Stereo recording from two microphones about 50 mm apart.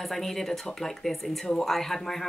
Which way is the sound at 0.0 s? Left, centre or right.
Centre.